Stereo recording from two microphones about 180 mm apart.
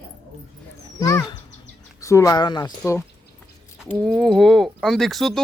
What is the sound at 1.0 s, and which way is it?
Speech, 15° left (ahead or behind).